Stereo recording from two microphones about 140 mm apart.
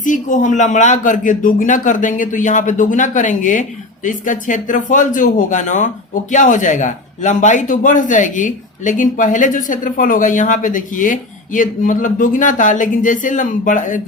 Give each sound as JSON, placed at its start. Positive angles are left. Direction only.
{"t": 0.0, "sound": "speech", "side_deg": 65}